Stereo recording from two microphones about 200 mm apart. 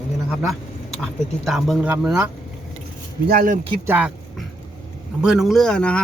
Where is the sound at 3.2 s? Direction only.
45° right (ahead or behind).